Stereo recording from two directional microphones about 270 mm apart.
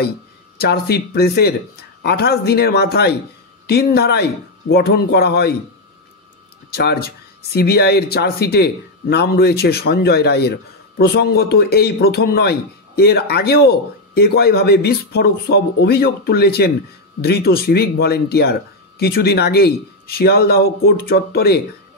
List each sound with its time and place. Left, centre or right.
0.6 s speech: left
6.7 s speech: left